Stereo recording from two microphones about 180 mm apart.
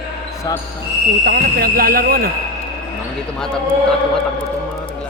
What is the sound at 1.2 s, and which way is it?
Speech, 60° right (ahead or behind).